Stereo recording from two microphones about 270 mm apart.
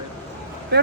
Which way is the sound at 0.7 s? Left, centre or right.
Right.